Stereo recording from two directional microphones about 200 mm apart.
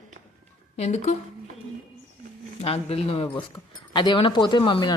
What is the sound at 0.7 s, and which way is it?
Speech, 35° left (ahead or behind).